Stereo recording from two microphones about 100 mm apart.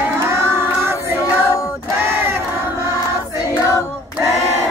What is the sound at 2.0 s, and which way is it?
Battle cry, 25° right (ahead or behind).